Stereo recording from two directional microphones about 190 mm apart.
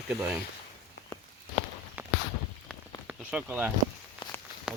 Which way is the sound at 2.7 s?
5° left (ahead or behind).